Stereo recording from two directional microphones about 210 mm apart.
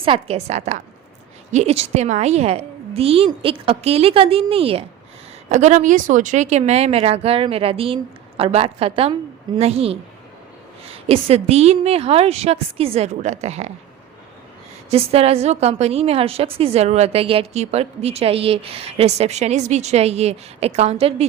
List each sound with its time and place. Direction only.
0.0 s a woman's voice: 25° right (ahead or behind)
14.8 s a woman's voice: 30° right (ahead or behind)